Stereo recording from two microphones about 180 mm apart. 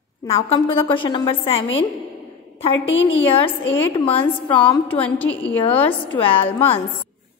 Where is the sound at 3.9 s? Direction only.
30° left (ahead or behind).